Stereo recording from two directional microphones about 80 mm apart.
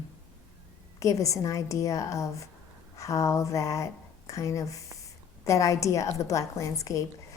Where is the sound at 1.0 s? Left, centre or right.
Left.